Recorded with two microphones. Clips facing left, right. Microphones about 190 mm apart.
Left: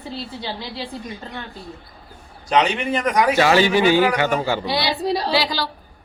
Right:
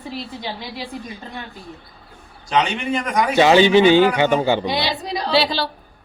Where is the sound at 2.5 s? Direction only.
5° left (ahead or behind).